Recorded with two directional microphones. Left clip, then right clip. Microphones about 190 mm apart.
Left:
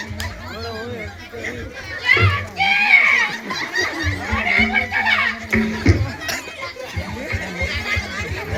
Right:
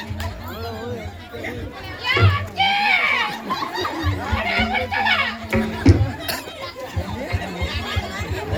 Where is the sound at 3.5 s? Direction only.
60° right (ahead or behind).